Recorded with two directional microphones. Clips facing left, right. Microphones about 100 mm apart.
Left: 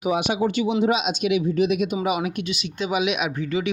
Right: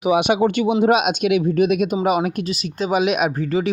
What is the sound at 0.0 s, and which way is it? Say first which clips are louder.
Speech: right 6 dB; 70° right (ahead or behind).